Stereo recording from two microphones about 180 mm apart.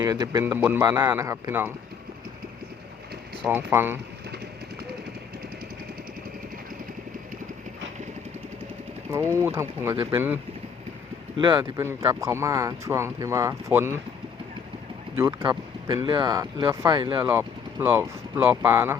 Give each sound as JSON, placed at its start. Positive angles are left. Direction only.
{"t": 0.0, "sound": "speech", "side_deg": -20}
{"t": 3.4, "sound": "speech", "side_deg": -10}
{"t": 9.1, "sound": "speech", "side_deg": -15}
{"t": 11.3, "sound": "speech", "side_deg": -25}
{"t": 15.1, "sound": "speech", "side_deg": -15}
{"t": 16.0, "sound": "speech", "side_deg": -25}
{"t": 17.2, "sound": "vehicle", "side_deg": -10}
{"t": 18.3, "sound": "speech", "side_deg": -15}